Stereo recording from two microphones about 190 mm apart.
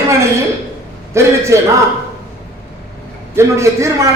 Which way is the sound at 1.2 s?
15° right (ahead or behind).